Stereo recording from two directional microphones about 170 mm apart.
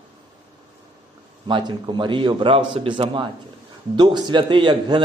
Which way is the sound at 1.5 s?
30° right (ahead or behind).